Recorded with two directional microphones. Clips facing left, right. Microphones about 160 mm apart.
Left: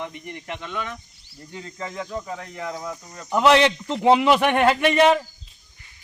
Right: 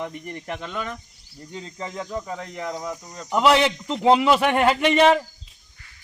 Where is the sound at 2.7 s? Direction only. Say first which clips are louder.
Right 1 dB; 15° right (ahead or behind).